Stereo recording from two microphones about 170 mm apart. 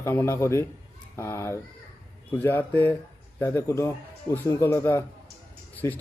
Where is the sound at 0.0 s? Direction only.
15° left (ahead or behind).